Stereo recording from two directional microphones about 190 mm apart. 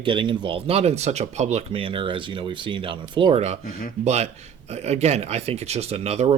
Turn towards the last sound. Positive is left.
turn(degrees=-35)  # may be behind; listen again after turning